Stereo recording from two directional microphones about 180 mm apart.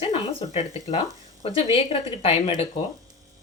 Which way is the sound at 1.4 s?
35° left (ahead or behind).